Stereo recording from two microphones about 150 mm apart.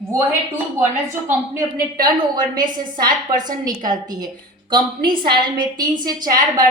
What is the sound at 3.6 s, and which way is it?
A woman's voice, 25° right (ahead or behind).